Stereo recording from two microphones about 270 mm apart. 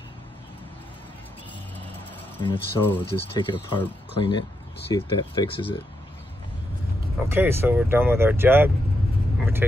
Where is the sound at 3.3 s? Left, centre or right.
Centre.